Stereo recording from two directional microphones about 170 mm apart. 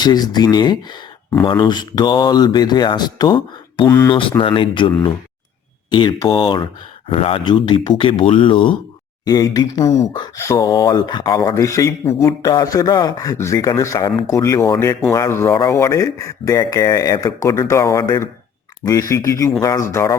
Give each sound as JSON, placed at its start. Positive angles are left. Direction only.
{"t": 0.0, "sound": "speech", "side_deg": 25}
{"t": 3.8, "sound": "speech", "side_deg": 15}
{"t": 4.1, "sound": "speech", "side_deg": 30}